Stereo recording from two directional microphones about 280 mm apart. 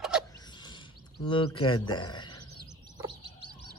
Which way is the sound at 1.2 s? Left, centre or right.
Centre.